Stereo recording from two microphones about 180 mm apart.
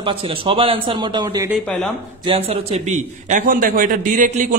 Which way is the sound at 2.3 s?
30° right (ahead or behind).